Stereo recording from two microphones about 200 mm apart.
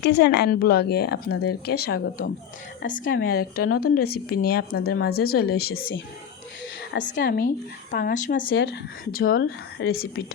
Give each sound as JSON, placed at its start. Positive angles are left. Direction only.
{"t": 0.0, "sound": "speech", "side_deg": 55}
{"t": 7.2, "sound": "speech", "side_deg": 55}